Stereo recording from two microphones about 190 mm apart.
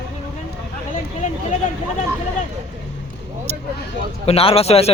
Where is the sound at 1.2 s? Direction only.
40° left (ahead or behind).